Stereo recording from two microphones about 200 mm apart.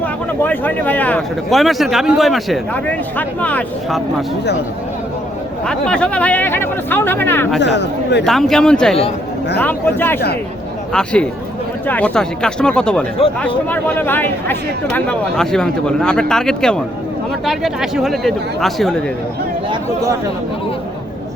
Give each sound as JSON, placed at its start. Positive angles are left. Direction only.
{"t": 0.0, "sound": "speech", "side_deg": 10}
{"t": 5.6, "sound": "speech", "side_deg": 5}
{"t": 7.6, "sound": "speech", "side_deg": 60}
{"t": 8.2, "sound": "speech", "side_deg": 0}